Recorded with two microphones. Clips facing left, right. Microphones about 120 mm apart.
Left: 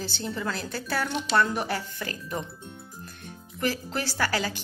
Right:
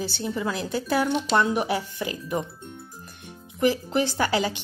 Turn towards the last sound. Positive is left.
turn(degrees=-20)  # may be behind; listen again after turning